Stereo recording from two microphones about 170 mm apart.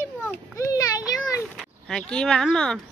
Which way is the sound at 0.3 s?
20° left (ahead or behind).